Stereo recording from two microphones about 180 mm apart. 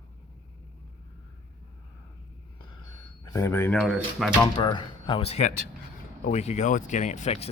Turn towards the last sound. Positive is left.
turn(degrees=35)  # may be behind; listen again after turning